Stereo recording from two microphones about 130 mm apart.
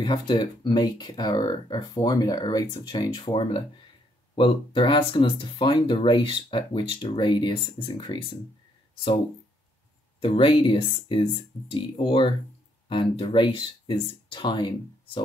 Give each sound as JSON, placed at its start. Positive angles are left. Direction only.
{"t": 0.0, "sound": "speech", "side_deg": 35}
{"t": 10.2, "sound": "speech", "side_deg": 40}